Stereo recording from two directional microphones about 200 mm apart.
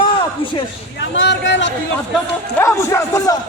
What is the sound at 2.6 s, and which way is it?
Speech, 15° left (ahead or behind).